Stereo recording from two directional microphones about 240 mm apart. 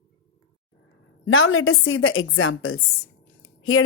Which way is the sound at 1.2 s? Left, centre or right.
Left.